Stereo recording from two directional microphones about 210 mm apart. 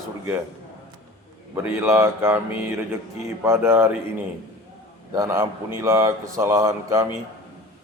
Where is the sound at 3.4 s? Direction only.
10° right (ahead or behind).